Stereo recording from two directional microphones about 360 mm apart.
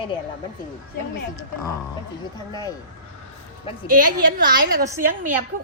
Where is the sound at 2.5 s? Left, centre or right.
Centre.